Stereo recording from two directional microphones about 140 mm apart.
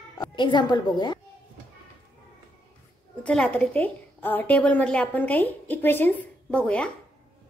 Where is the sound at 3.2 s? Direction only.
10° left (ahead or behind).